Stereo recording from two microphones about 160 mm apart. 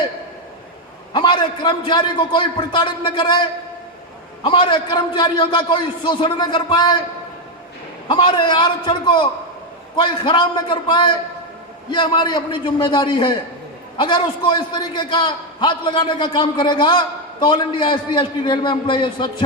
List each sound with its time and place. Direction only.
1.1 s a man's voice: 30° left (ahead or behind)
4.4 s a man's voice: 30° left (ahead or behind)
8.0 s a man's voice: 30° left (ahead or behind)